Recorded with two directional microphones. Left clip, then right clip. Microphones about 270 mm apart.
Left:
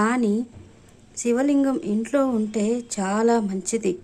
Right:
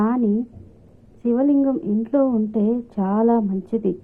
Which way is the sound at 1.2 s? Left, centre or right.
Centre.